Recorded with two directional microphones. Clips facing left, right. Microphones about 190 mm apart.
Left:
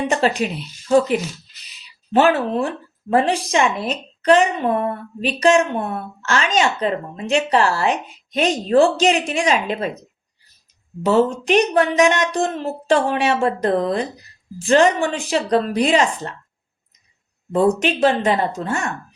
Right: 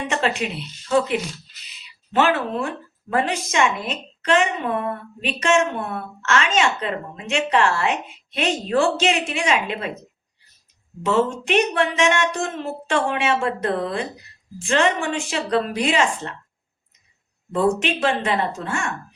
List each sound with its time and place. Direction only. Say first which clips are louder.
0.1 s a woman's voice: left 4 dB; 40° left (ahead or behind)
11.0 s a woman's voice: left 4 dB; 35° left (ahead or behind)
17.5 s a woman's voice: left 3 dB; 40° left (ahead or behind)